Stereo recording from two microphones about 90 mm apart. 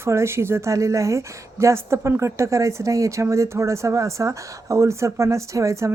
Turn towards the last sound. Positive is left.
turn(degrees=-35)  # may be behind; listen again after turning